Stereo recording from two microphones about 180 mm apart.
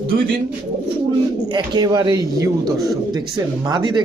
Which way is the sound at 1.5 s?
25° right (ahead or behind).